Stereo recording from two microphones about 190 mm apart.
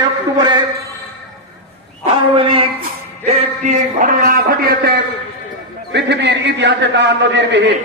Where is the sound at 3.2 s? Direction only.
40° right (ahead or behind).